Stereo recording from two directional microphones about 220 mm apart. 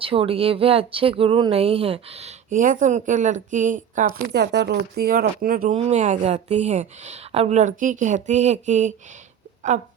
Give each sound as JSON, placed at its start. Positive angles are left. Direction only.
{"t": 0.0, "sound": "speech", "side_deg": -25}